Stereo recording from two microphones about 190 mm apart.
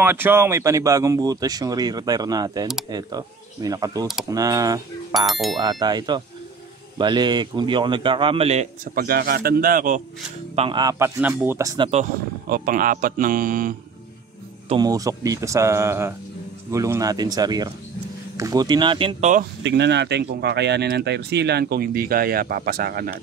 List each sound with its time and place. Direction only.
0.0 s speech: 10° right (ahead or behind)
5.1 s speech: centre (ahead or behind)
5.6 s speech: 20° right (ahead or behind)
8.9 s speech: 50° right (ahead or behind)
10.5 s speech: 30° right (ahead or behind)
11.1 s speech: 10° right (ahead or behind)
12.4 s speech: 50° right (ahead or behind)
14.7 s speech: 20° right (ahead or behind)
19.6 s speech: 65° right (ahead or behind)